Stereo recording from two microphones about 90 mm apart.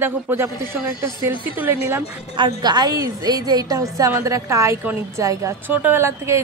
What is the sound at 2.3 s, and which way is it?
A woman's voice, 55° right (ahead or behind).